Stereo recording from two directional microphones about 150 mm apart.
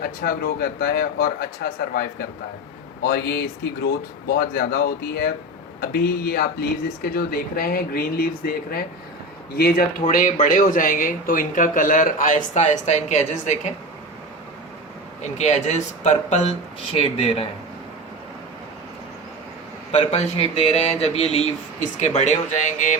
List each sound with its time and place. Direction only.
0.0 s speech: 85° left
10.1 s speech: 65° left (ahead or behind)
15.2 s speech: 50° left (ahead or behind)
16.9 s speech: 40° left (ahead or behind)
19.9 s speech: 45° left (ahead or behind)